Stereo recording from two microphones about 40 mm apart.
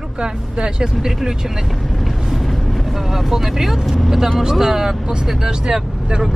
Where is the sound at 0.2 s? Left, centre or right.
Right.